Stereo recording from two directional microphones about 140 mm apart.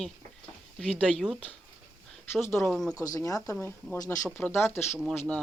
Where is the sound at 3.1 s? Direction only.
25° left (ahead or behind).